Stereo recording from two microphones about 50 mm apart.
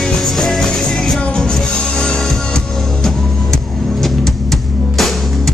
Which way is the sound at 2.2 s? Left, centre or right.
Centre.